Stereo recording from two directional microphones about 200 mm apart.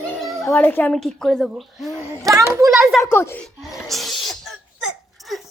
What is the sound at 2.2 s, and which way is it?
Speech, 15° right (ahead or behind).